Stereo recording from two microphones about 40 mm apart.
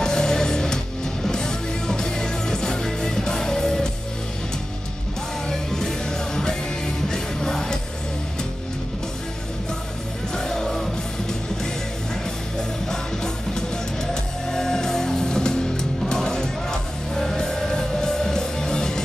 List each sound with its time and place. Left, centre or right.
0.0 s music: centre
5.5 s music: centre
10.3 s music: centre
12.9 s music: centre